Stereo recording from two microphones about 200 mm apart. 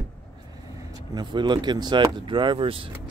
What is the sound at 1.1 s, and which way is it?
Speech, 20° right (ahead or behind).